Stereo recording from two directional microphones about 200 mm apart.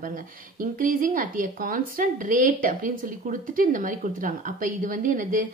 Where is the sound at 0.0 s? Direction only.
45° right (ahead or behind).